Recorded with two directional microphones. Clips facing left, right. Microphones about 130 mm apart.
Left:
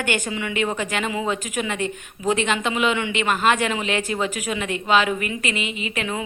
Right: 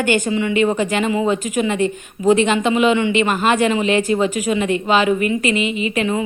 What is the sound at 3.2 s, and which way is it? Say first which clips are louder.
Speech: right 2 dB; 5° right (ahead or behind).